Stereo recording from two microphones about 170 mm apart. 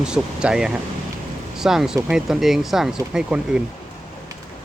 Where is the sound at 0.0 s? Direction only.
5° right (ahead or behind).